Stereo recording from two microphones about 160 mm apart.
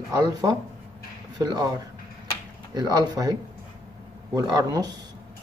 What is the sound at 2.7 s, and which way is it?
Speech, 25° right (ahead or behind).